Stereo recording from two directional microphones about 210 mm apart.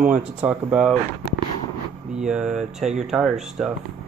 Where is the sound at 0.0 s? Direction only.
5° right (ahead or behind).